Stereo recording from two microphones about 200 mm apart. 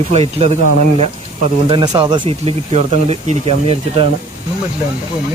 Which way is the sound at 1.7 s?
20° right (ahead or behind).